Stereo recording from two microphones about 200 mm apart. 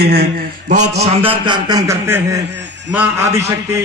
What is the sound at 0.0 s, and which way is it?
Speech, 50° right (ahead or behind).